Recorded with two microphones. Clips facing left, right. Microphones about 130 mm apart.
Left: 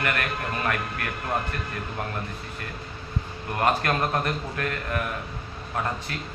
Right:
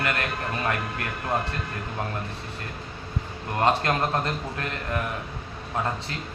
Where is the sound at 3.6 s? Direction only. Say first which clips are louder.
Right 1 dB; 25° right (ahead or behind).